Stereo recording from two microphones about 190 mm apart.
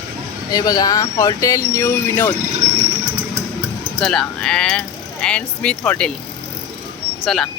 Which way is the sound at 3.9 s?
5° left (ahead or behind).